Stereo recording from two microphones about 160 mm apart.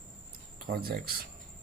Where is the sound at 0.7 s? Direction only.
70° right (ahead or behind).